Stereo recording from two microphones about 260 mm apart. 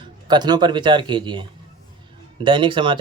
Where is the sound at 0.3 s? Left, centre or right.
Centre.